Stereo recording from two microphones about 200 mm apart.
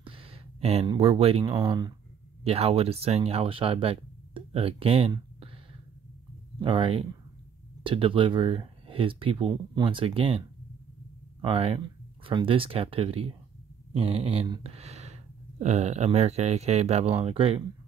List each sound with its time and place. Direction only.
0.0 s speech: 25° right (ahead or behind)
6.6 s speech: 25° right (ahead or behind)
11.4 s speech: 25° right (ahead or behind)